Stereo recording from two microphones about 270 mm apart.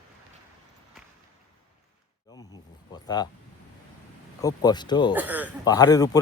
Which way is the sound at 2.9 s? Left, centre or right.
Centre.